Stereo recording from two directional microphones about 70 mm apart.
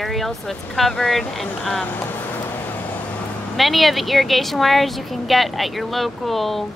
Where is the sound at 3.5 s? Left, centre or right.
Centre.